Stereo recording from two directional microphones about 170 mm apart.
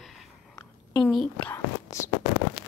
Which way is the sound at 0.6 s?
20° left (ahead or behind).